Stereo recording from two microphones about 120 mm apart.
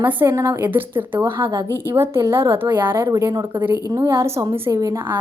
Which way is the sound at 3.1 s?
30° right (ahead or behind).